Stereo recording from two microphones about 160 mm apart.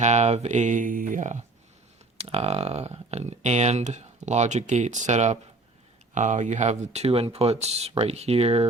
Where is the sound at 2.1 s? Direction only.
40° right (ahead or behind).